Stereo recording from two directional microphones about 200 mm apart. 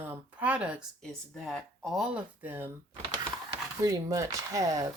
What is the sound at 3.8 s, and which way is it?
Speech, 15° right (ahead or behind).